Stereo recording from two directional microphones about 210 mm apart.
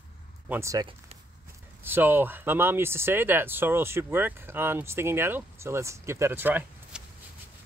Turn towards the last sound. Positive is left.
turn(degrees=-10)  # may be behind; listen again after turning